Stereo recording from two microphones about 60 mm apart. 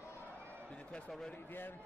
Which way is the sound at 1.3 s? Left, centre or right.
Left.